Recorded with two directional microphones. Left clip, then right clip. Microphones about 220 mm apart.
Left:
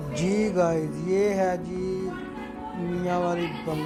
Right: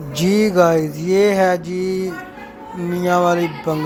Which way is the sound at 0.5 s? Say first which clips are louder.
Right 10 dB; 20° right (ahead or behind).